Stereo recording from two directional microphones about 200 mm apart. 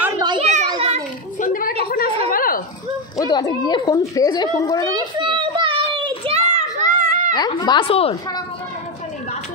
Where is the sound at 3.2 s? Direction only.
20° left (ahead or behind).